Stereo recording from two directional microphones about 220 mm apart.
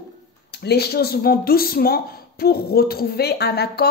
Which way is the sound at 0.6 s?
45° left (ahead or behind).